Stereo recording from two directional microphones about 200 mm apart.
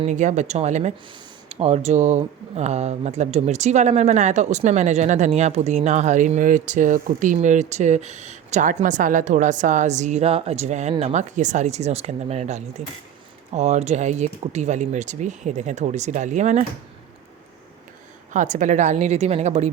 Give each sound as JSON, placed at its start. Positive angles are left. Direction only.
{"t": 0.0, "sound": "speech", "side_deg": -35}
{"t": 18.3, "sound": "speech", "side_deg": -35}